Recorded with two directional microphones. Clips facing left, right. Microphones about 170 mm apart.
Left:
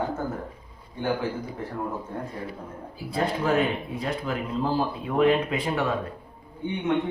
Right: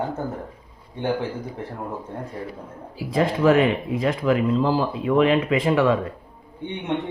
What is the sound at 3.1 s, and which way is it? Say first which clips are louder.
Speech: right 7 dB; 90° right.